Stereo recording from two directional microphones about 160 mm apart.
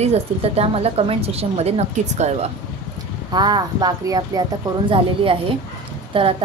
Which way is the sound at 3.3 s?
25° right (ahead or behind).